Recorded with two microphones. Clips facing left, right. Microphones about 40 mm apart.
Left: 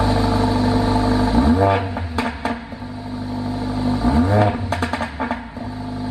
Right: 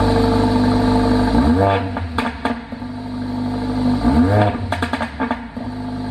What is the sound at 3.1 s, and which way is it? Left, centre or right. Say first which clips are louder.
Vehicle: right 3 dB; centre.